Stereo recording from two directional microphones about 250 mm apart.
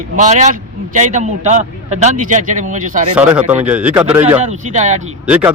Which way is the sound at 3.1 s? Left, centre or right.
Centre.